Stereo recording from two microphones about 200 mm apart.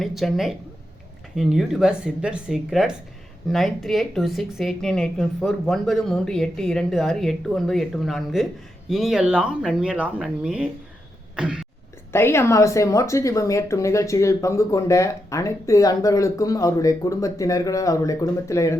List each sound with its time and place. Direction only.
0.0 s speech: centre (ahead or behind)
11.3 s cough: 5° right (ahead or behind)
12.1 s a woman's voice: 15° left (ahead or behind)